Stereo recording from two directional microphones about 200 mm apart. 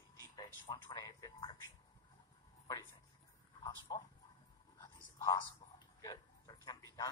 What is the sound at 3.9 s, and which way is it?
Speech, 20° left (ahead or behind).